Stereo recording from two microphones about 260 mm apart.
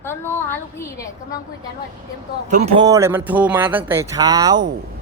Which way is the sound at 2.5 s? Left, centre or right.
Right.